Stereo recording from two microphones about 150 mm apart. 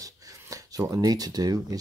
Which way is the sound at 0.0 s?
20° right (ahead or behind).